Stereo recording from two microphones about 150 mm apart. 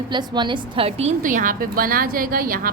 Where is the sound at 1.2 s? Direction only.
60° right (ahead or behind).